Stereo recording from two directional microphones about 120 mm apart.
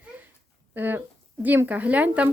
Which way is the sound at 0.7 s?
15° right (ahead or behind).